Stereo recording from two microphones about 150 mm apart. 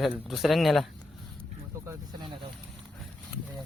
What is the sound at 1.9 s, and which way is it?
Speech, 30° right (ahead or behind).